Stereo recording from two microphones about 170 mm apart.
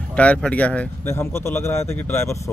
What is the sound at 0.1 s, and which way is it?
A man's voice, 5° left (ahead or behind).